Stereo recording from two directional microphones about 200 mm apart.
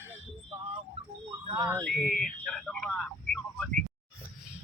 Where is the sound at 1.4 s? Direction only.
15° right (ahead or behind).